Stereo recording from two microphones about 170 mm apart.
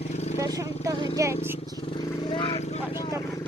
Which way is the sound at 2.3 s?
30° left (ahead or behind).